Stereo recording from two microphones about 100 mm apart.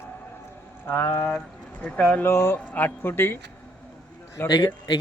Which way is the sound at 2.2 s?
25° left (ahead or behind).